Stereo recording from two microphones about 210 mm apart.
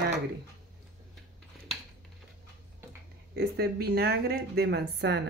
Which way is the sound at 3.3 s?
50° right (ahead or behind).